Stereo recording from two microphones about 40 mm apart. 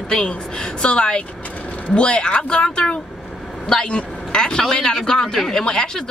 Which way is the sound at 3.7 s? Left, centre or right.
Left.